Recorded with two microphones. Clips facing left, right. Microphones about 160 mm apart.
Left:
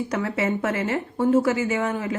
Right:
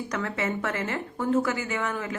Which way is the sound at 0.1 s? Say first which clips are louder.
Left 3 dB; 20° left (ahead or behind).